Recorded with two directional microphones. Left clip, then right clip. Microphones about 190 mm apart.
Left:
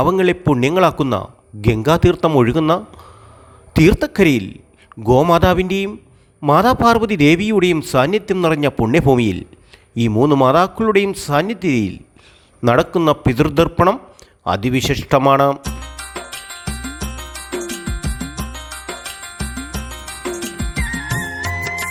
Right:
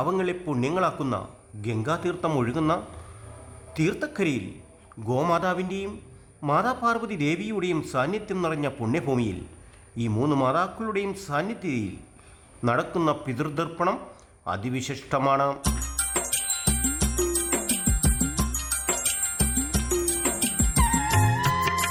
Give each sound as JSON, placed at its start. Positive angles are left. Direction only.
{"t": 0.2, "sound": "a man's voice", "side_deg": 40}
{"t": 15.6, "sound": "music", "side_deg": 0}